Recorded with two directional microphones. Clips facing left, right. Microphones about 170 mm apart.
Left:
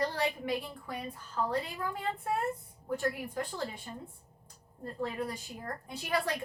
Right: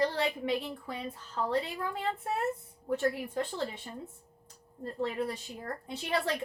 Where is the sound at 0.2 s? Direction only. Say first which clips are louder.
Right 2 dB; 25° right (ahead or behind).